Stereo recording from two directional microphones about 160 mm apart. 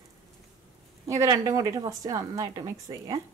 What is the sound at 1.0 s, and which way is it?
A woman's voice, 20° right (ahead or behind).